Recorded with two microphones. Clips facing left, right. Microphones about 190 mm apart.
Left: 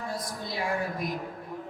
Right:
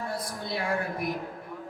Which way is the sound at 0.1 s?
60° right (ahead or behind).